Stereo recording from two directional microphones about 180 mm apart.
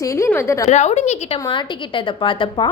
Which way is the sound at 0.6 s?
40° left (ahead or behind).